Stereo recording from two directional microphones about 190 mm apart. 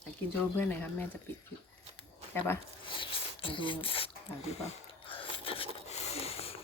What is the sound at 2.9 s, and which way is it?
Zipper, 25° left (ahead or behind).